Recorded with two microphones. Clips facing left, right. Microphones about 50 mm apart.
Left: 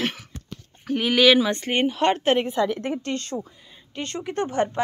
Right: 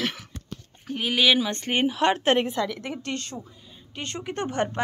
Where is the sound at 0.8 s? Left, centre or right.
Left.